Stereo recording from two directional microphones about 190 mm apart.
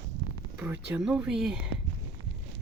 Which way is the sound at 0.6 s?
10° right (ahead or behind).